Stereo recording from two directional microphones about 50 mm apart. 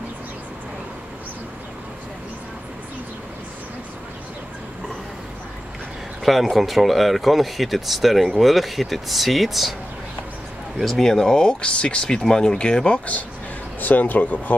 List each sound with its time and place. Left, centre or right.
6.2 s speech: centre
10.8 s speech: centre
13.7 s a man's voice: left